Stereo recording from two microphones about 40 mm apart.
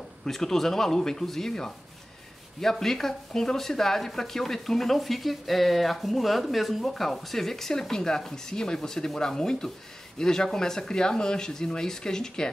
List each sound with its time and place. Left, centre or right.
0.2 s speech: centre